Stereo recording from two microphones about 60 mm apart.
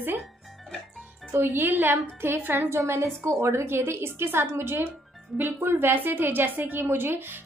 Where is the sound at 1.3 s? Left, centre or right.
Right.